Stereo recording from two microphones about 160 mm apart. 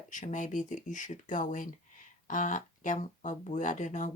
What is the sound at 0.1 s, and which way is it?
Speech, 50° left (ahead or behind).